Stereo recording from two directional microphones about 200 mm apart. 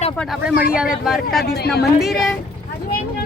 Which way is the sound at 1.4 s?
55° left (ahead or behind).